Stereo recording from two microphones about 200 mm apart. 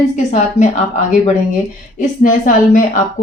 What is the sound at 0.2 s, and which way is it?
Speech, 35° left (ahead or behind).